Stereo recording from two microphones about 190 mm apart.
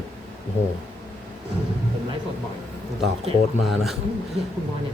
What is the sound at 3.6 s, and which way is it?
Speech, centre (ahead or behind).